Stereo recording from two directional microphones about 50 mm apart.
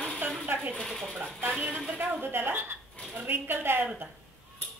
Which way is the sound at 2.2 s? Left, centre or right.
Right.